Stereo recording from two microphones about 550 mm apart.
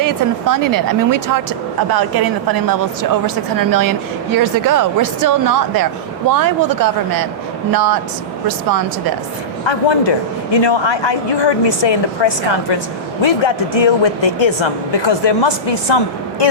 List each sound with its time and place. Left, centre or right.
0.0 s a woman's voice: right
9.6 s a woman's voice: left